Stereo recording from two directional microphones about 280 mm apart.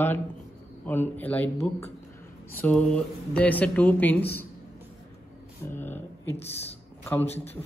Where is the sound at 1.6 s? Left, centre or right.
Left.